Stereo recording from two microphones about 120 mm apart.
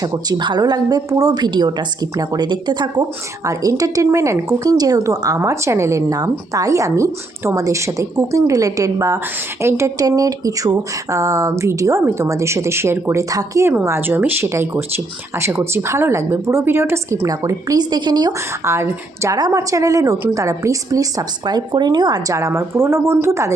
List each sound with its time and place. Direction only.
0.0 s speech: 30° right (ahead or behind)
18.6 s speech: 20° right (ahead or behind)